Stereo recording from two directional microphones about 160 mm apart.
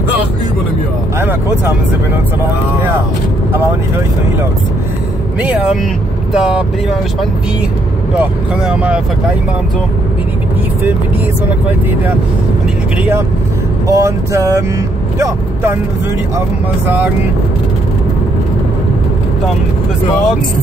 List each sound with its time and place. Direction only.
5.4 s speech: 5° right (ahead or behind)
8.2 s speech: 5° right (ahead or behind)
13.8 s speech: 20° right (ahead or behind)